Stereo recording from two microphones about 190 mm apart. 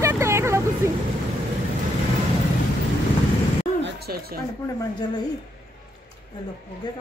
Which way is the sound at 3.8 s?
65° right (ahead or behind).